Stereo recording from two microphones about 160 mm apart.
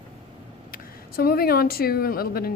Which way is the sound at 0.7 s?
65° left (ahead or behind).